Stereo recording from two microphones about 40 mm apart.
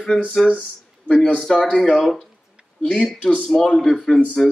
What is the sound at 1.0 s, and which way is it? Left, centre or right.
Speech, left.